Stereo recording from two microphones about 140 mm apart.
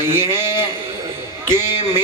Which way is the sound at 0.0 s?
15° right (ahead or behind).